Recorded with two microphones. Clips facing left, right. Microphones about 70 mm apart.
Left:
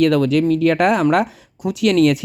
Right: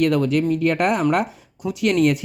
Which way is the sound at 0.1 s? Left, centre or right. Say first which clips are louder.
Left 4 dB; left.